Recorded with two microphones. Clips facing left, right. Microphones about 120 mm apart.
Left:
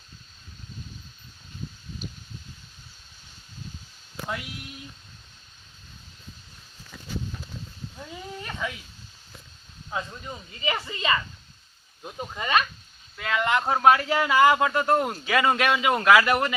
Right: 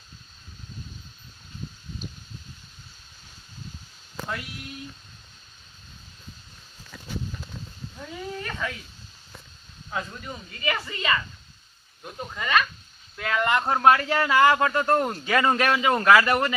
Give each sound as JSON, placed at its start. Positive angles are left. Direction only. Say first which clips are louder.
{"t": 8.4, "sound": "a sound", "louder": "left 1 dB", "side_deg": 15}
{"t": 9.9, "sound": "a woman's voice", "louder": "even", "side_deg": 20}
{"t": 13.1, "sound": "speech", "louder": "right 1 dB", "side_deg": 0}